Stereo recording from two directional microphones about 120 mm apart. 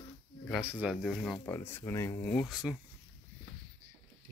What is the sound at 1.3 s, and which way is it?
Speech, 20° left (ahead or behind).